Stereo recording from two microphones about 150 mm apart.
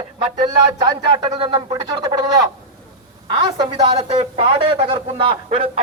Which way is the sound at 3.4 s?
30° right (ahead or behind).